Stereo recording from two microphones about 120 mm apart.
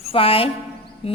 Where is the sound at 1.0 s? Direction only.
50° left (ahead or behind).